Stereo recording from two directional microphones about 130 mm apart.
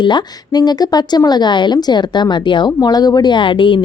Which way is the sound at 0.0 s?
35° left (ahead or behind).